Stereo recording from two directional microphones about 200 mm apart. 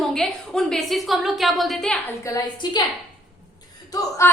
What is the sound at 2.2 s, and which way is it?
Speech, 20° left (ahead or behind).